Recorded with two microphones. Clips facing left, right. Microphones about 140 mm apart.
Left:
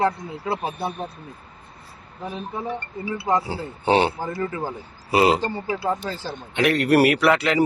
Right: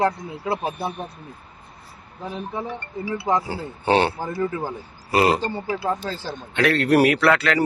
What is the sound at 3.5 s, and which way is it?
Speech, 15° left (ahead or behind).